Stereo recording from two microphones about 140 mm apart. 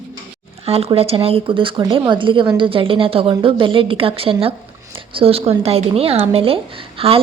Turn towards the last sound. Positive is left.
turn(degrees=-40)  # may be behind; listen again after turning